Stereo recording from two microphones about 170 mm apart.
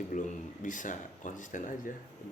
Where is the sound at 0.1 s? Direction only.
45° left (ahead or behind).